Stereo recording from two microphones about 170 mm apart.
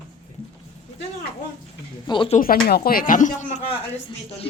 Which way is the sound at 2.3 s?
55° left (ahead or behind).